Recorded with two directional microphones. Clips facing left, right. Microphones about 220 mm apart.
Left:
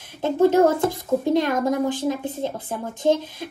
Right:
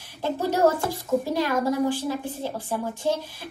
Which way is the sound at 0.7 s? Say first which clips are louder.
Left 3 dB; 20° left (ahead or behind).